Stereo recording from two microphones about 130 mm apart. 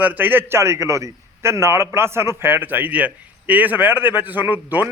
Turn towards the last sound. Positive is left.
turn(degrees=-15)  # may be behind; listen again after turning